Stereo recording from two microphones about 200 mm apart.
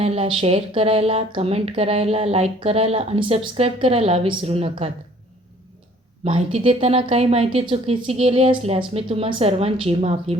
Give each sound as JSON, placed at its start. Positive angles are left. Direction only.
{"t": 0.0, "sound": "speech", "side_deg": -30}
{"t": 6.2, "sound": "speech", "side_deg": -30}